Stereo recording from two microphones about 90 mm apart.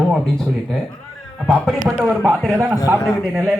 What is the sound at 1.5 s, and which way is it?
Speech, 5° left (ahead or behind).